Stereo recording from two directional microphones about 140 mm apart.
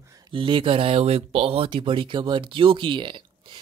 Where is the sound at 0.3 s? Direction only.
35° right (ahead or behind).